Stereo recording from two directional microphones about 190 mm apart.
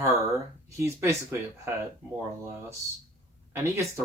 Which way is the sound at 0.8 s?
15° right (ahead or behind).